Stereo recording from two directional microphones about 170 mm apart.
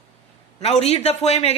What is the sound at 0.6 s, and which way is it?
Speech, 40° left (ahead or behind).